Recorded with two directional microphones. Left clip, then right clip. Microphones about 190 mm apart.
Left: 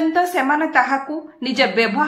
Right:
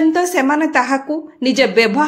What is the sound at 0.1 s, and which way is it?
A woman's voice, 45° right (ahead or behind).